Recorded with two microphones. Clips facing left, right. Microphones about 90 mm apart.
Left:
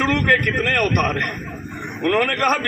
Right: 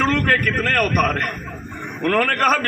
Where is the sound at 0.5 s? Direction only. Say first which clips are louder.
Even; 40° right (ahead or behind).